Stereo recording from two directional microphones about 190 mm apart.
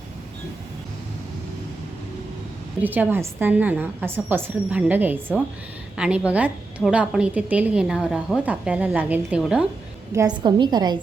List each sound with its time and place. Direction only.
2.8 s a woman's voice: 10° right (ahead or behind)
10.2 s a woman's voice: 20° right (ahead or behind)